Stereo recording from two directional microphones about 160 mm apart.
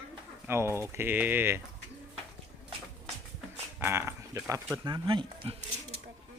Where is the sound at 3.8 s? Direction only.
15° right (ahead or behind).